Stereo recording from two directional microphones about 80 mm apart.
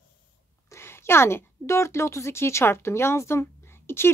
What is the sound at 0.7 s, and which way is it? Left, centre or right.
Speech, left.